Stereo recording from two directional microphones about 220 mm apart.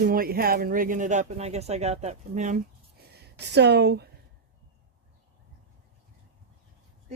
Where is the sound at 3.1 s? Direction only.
50° right (ahead or behind).